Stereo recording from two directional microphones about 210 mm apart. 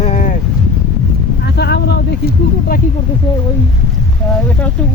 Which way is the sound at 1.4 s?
50° left (ahead or behind).